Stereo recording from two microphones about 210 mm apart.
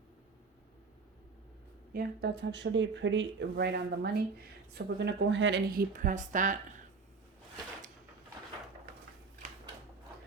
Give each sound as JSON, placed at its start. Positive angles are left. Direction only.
{"t": 1.9, "sound": "speech", "side_deg": -50}